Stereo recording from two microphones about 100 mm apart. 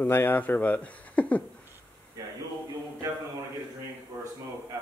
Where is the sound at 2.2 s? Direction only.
35° right (ahead or behind).